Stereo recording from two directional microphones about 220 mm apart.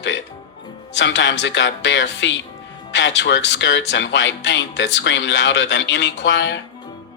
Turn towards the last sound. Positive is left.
turn(degrees=55)  # may be behind; listen again after turning